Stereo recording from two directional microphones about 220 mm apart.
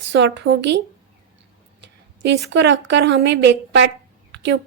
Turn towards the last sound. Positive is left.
turn(degrees=-50)  # may be behind; listen again after turning